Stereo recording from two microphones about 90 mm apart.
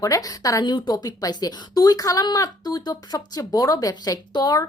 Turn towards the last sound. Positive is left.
turn(degrees=45)  # may be behind; listen again after turning